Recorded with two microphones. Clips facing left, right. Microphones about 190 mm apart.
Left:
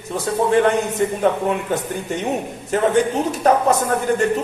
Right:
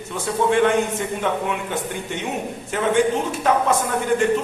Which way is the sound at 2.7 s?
40° left (ahead or behind).